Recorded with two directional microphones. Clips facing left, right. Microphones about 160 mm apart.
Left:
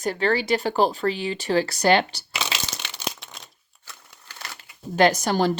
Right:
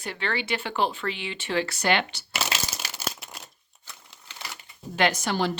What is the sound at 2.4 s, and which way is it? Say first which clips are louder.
Crumpling: even; 5° right (ahead or behind).